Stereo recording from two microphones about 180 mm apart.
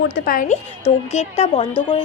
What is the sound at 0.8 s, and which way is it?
Speech, 35° left (ahead or behind).